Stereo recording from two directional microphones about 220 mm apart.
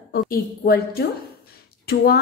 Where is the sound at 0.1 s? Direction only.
45° left (ahead or behind).